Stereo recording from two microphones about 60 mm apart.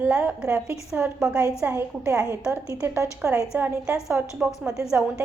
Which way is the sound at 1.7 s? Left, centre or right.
Right.